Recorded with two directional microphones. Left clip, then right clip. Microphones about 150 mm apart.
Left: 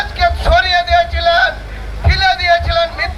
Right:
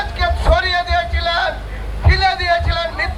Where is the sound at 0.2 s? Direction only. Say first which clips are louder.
Left 5 dB; 50° left (ahead or behind).